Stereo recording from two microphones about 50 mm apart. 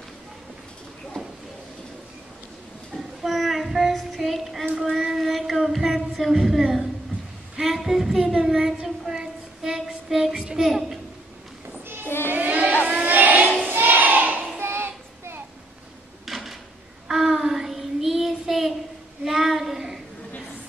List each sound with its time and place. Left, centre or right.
3.2 s child singing: centre
7.6 s female singing: centre
8.5 s child singing: centre
10.3 s a child's voice: centre
12.3 s a sound: right
12.8 s vehicle: right
13.7 s a sound: right
14.6 s child singing: right
16.3 s a sound: centre
17.1 s child singing: centre